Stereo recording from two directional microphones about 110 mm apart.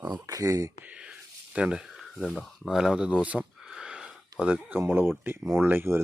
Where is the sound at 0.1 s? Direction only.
35° right (ahead or behind).